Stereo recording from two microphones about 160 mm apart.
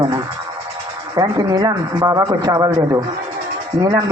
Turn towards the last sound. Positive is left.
turn(degrees=-25)  # may be behind; listen again after turning